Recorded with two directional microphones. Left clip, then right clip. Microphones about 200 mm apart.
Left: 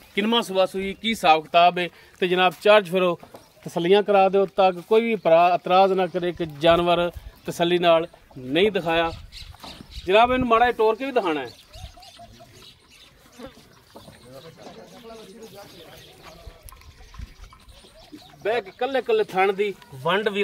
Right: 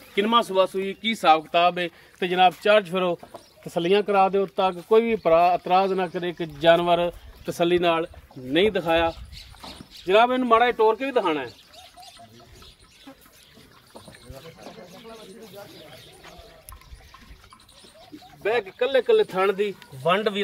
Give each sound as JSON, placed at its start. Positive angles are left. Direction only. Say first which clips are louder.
{"t": 0.1, "sound": "speech", "louder": "right 2 dB", "side_deg": 55}
{"t": 8.5, "sound": "speech", "louder": "even", "side_deg": 30}
{"t": 10.0, "sound": "speech", "louder": "left 1 dB", "side_deg": 10}
{"t": 18.4, "sound": "speech", "louder": "right 1 dB", "side_deg": 0}